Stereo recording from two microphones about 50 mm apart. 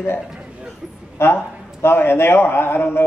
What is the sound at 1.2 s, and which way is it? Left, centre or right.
A man's voice, left.